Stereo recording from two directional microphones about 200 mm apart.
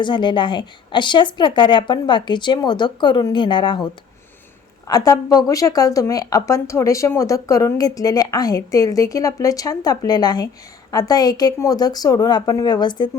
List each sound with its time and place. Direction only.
0.0 s a woman's voice: 25° left (ahead or behind)
4.9 s a woman's voice: 20° left (ahead or behind)